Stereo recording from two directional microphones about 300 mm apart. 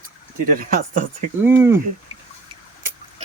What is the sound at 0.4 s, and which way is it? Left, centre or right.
Speech, right.